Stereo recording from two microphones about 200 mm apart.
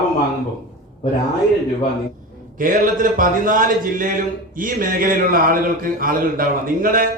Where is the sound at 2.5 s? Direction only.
40° right (ahead or behind).